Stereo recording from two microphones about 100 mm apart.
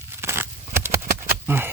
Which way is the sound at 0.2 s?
25° right (ahead or behind).